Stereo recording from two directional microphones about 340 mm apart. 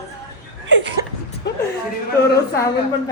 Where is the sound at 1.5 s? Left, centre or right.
Left.